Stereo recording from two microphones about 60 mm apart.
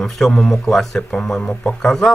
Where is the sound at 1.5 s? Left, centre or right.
Centre.